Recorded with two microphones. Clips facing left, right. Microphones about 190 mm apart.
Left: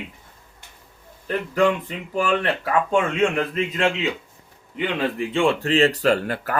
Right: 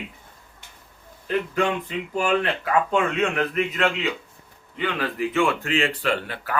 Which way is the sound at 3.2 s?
25° left (ahead or behind).